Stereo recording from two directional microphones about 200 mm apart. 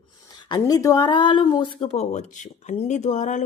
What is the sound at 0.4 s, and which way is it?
Speech, 20° left (ahead or behind).